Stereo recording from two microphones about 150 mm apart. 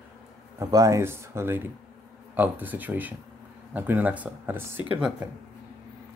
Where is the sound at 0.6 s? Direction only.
25° right (ahead or behind).